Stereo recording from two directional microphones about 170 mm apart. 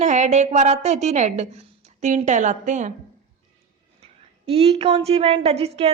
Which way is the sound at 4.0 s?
35° right (ahead or behind).